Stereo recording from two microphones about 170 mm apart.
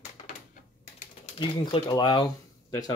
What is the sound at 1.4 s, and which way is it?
Speech, 25° left (ahead or behind).